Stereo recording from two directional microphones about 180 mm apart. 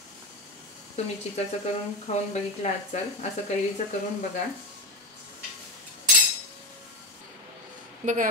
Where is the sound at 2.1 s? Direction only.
40° left (ahead or behind).